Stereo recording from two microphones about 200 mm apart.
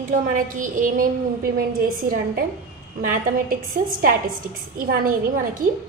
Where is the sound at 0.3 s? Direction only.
40° right (ahead or behind).